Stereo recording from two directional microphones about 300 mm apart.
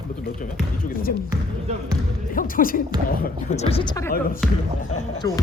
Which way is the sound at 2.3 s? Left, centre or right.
Left.